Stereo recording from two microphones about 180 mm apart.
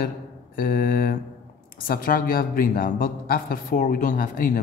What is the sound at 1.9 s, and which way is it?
A man's voice, 50° left (ahead or behind).